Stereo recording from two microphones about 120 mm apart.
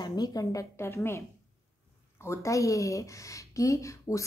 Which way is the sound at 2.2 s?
25° left (ahead or behind).